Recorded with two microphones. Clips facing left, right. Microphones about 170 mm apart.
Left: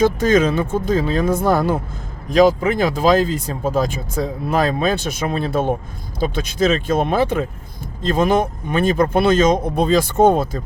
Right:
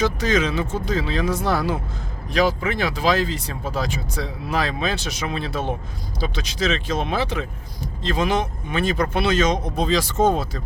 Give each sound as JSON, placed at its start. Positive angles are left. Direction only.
{"t": 0.0, "sound": "speech", "side_deg": 50}